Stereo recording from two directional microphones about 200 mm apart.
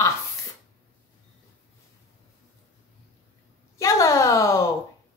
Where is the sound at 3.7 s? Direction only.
15° left (ahead or behind).